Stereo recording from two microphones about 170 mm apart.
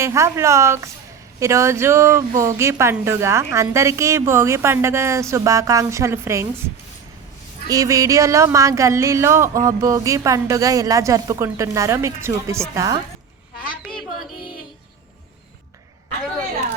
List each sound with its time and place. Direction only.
0.0 s speech: 15° right (ahead or behind)
7.7 s speech: 20° right (ahead or behind)